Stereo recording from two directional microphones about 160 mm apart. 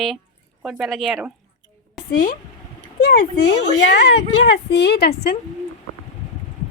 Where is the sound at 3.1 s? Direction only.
90° left.